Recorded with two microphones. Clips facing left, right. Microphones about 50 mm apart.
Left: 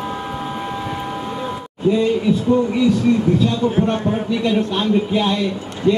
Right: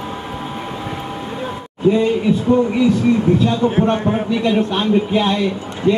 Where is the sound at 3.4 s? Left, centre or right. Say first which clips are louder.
Right 2 dB; right.